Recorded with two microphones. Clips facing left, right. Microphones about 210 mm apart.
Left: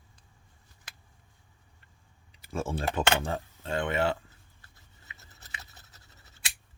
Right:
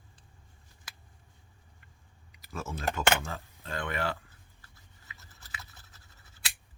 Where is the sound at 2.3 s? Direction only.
30° left (ahead or behind).